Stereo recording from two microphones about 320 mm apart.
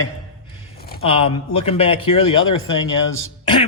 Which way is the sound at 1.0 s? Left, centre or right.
Centre.